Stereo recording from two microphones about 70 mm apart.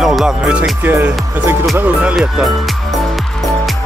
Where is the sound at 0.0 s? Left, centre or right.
Centre.